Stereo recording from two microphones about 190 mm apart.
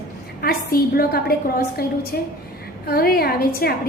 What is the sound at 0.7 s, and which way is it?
A woman's voice, 50° left (ahead or behind).